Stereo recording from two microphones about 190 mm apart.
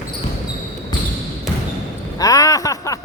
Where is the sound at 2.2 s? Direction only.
20° left (ahead or behind).